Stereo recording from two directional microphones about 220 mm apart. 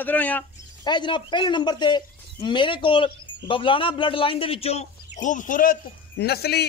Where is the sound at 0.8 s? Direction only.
20° left (ahead or behind).